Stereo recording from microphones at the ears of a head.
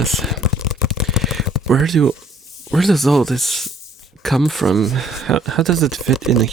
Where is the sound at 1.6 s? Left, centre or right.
Right.